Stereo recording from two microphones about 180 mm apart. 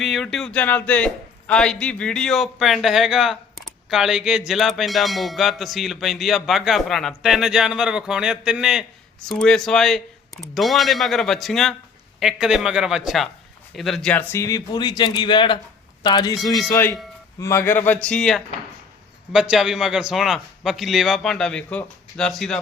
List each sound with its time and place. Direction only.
0.0 s a man's voice: centre (ahead or behind)